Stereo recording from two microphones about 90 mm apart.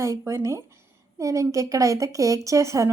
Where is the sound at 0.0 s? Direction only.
35° right (ahead or behind).